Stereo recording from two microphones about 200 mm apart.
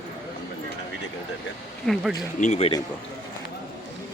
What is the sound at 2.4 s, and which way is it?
Speech, 35° left (ahead or behind).